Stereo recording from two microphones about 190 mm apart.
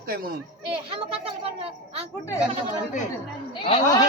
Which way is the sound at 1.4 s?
30° right (ahead or behind).